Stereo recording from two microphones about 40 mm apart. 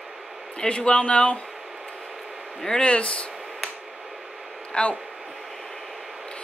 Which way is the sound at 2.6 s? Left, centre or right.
Centre.